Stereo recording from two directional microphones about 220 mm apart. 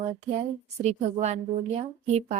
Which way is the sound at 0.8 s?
30° right (ahead or behind).